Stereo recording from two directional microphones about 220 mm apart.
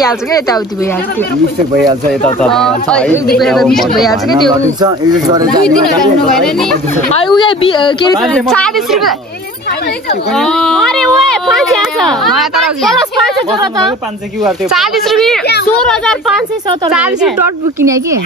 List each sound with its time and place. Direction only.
0.0 s speech: 15° left (ahead or behind)
2.2 s speech: 5° left (ahead or behind)
4.6 s a woman's voice: 20° right (ahead or behind)
5.9 s speech: centre (ahead or behind)
7.3 s a woman's voice: 20° left (ahead or behind)
8.2 s speech: centre (ahead or behind)
10.3 s speech: centre (ahead or behind)
14.4 s a woman's voice: centre (ahead or behind)